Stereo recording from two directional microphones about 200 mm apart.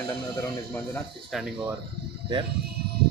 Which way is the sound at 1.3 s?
5° right (ahead or behind).